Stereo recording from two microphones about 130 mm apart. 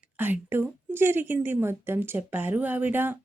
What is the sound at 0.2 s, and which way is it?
A woman's voice, 15° right (ahead or behind).